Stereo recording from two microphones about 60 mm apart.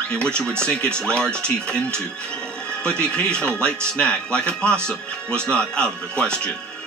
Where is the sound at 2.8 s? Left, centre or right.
Centre.